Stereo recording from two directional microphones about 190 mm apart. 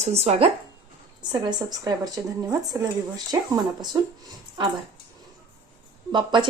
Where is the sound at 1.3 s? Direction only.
20° right (ahead or behind).